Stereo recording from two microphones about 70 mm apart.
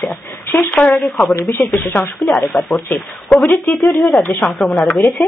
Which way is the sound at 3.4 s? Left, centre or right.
Left.